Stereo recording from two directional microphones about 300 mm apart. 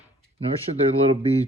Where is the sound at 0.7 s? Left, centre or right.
Right.